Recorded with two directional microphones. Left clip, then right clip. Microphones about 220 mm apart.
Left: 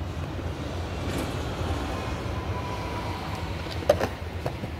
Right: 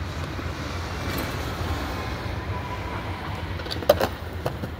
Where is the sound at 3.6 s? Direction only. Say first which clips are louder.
Right 3 dB; centre (ahead or behind).